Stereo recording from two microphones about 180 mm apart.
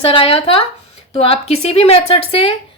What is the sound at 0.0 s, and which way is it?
A woman's voice, 30° left (ahead or behind).